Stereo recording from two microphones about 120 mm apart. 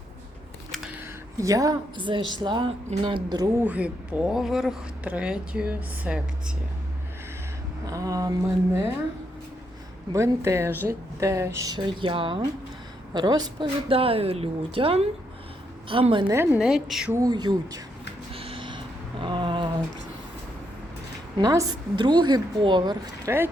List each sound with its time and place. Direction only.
1.4 s speech: 30° right (ahead or behind)
2.0 s speech: 45° right (ahead or behind)
3.6 s speech: 10° right (ahead or behind)
7.9 s speech: 30° right (ahead or behind)
10.1 s speech: 25° right (ahead or behind); by 12.5 s 45° right (ahead or behind)
13.1 s a woman's voice: 35° right (ahead or behind)
16.3 s speech: 20° right (ahead or behind)
16.6 s a woman's voice: 5° right (ahead or behind)
17.2 s speech: 35° right (ahead or behind)
18.3 s a sound: 50° right (ahead or behind)
21.3 s speech: 30° right (ahead or behind)
23.2 s speech: 20° right (ahead or behind)